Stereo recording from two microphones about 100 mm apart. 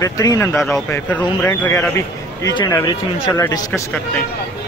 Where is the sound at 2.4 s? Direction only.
45° left (ahead or behind).